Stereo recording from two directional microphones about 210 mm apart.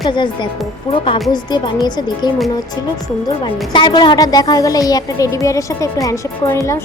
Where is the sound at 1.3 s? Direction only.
20° left (ahead or behind).